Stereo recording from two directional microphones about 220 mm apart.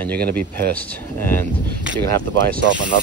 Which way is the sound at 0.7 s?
10° left (ahead or behind).